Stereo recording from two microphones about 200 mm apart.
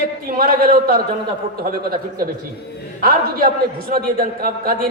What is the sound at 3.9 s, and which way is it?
Speech, 45° right (ahead or behind).